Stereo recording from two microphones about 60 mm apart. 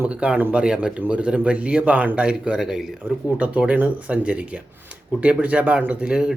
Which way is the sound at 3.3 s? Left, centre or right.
Right.